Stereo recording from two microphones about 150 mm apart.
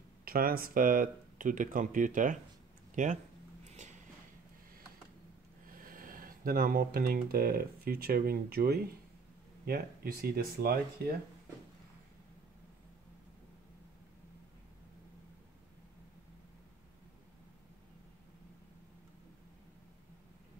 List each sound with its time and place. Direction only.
0.2 s speech: 75° right (ahead or behind); by 3.1 s 60° right (ahead or behind)
5.8 s speech: 70° right (ahead or behind); by 11.1 s 90° right